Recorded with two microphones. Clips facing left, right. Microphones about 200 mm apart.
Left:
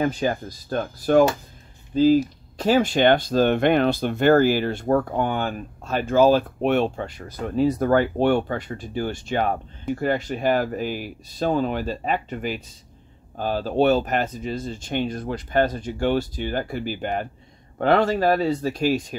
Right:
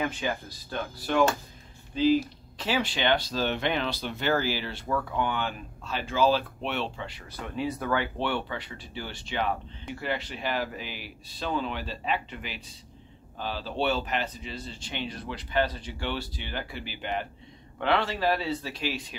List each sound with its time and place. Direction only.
0.0 s speech: 40° left (ahead or behind)